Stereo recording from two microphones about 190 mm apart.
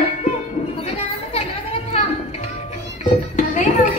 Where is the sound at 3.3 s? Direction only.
40° left (ahead or behind).